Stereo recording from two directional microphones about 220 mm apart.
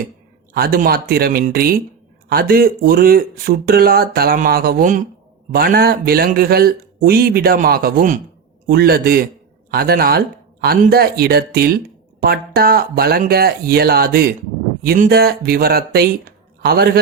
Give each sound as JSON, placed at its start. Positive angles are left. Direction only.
{"t": 0.5, "sound": "a man's voice", "side_deg": -45}